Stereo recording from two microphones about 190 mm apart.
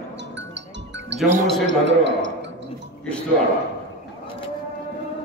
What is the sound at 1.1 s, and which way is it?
A man's voice, 70° right (ahead or behind).